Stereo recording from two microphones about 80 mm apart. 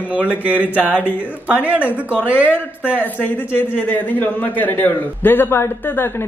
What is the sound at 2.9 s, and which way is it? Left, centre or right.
A man's voice, left.